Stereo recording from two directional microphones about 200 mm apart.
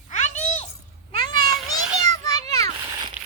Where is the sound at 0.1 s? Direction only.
35° left (ahead or behind).